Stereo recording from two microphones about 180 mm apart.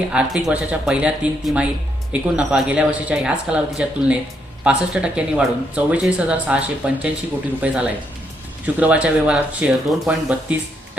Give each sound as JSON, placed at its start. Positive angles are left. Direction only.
{"t": 0.1, "sound": "speech", "side_deg": -5}